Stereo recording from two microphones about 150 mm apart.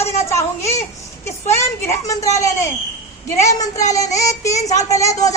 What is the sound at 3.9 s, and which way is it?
A woman's voice, 20° left (ahead or behind).